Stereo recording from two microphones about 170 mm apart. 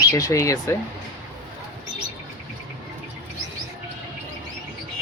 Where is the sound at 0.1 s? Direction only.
20° left (ahead or behind).